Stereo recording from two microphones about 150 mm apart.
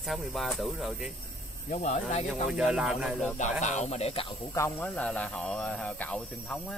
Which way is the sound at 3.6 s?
50° left (ahead or behind).